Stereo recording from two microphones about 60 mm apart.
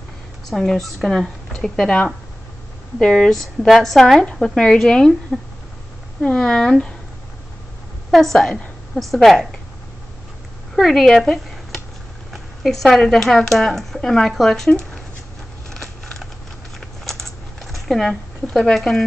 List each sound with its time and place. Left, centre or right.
0.5 s speech: centre
3.0 s a woman's voice: centre
6.2 s speech: centre
8.1 s a woman's voice: centre
10.8 s speech: centre
15.7 s a sound: centre
17.8 s a woman's voice: centre